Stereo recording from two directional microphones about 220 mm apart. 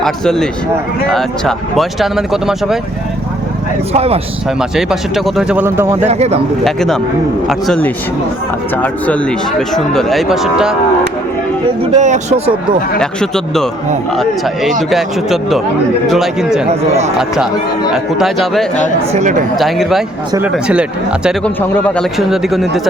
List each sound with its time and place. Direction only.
0.0 s speech: centre (ahead or behind)
3.9 s speech: 25° right (ahead or behind)
4.7 s speech: centre (ahead or behind)
6.1 s speech: 30° right (ahead or behind)
6.7 s speech: centre (ahead or behind)
11.8 s speech: 30° right (ahead or behind)
13.0 s speech: centre (ahead or behind)
16.6 s speech: 30° right (ahead or behind)
17.2 s speech: centre (ahead or behind)
19.1 s speech: 30° right (ahead or behind)
19.5 s speech: centre (ahead or behind)